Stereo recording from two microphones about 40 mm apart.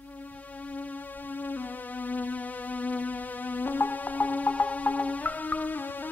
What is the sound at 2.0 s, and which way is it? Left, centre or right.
Music, left.